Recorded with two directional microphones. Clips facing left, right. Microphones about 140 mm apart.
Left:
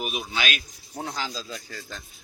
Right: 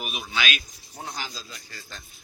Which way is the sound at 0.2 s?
40° left (ahead or behind).